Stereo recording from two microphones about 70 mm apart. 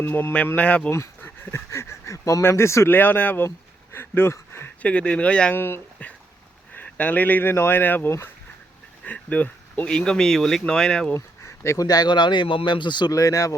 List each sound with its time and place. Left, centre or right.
0.0 s speech: left
0.4 s speech: left
0.9 s speech: left
2.9 s speech: left
3.9 s a sound: left
4.8 s speech: centre
5.5 s speech: left
6.7 s speech: left
11.1 s a sound: left
11.8 s speech: left
13.1 s speech: left